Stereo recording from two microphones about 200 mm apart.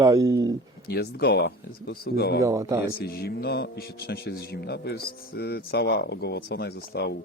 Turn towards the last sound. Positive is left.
turn(degrees=55)  # may be behind; listen again after turning